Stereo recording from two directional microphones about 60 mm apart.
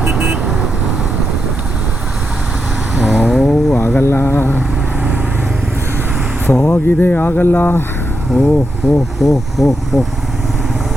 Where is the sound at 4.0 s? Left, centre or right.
Left.